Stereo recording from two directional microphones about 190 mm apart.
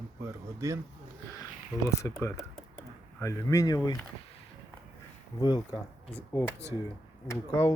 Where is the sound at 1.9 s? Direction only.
15° left (ahead or behind).